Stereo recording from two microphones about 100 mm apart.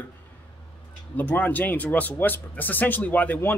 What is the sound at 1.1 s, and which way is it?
Speech, 15° left (ahead or behind).